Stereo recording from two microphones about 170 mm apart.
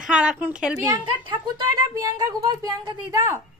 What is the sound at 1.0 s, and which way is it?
A woman's voice, 25° right (ahead or behind).